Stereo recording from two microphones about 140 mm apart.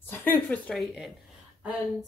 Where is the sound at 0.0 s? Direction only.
15° left (ahead or behind).